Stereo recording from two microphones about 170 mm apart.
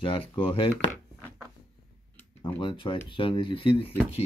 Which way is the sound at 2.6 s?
30° left (ahead or behind).